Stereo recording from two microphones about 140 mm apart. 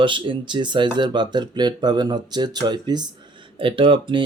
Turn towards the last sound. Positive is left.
turn(degrees=-35)  # may be behind; listen again after turning